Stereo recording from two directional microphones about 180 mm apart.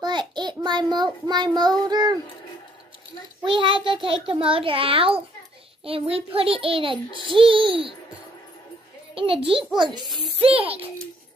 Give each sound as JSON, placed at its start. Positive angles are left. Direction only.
{"t": 0.0, "sound": "child singing", "side_deg": -25}
{"t": 3.4, "sound": "a child's voice", "side_deg": -30}
{"t": 9.1, "sound": "a child's voice", "side_deg": -30}